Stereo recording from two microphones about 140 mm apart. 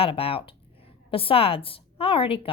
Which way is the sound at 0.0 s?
40° left (ahead or behind).